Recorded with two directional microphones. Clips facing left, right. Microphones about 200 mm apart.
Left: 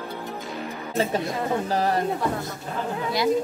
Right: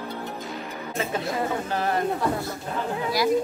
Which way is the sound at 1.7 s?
35° left (ahead or behind).